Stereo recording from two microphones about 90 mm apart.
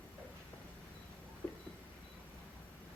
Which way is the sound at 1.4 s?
20° left (ahead or behind).